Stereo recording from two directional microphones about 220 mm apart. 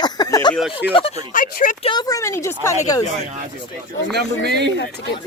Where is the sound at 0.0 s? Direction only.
15° left (ahead or behind).